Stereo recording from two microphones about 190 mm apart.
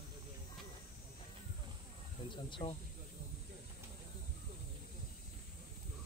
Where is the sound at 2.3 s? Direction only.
25° left (ahead or behind).